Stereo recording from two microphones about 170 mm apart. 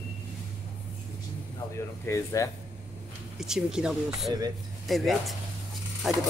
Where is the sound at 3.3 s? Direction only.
5° right (ahead or behind).